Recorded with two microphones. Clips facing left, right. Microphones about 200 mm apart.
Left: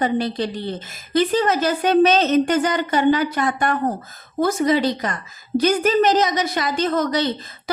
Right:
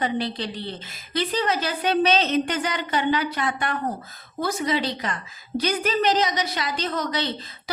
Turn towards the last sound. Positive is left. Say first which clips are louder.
# left 7 dB
turn(degrees=45)  # may be behind; listen again after turning